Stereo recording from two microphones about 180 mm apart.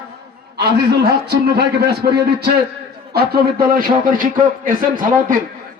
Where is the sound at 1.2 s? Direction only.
65° right (ahead or behind); by 5.1 s 50° right (ahead or behind).